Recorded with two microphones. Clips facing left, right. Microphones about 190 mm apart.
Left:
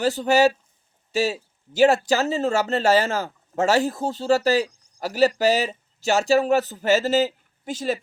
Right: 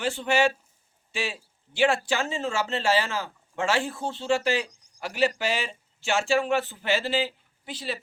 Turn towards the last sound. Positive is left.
turn(degrees=45)  # may be behind; listen again after turning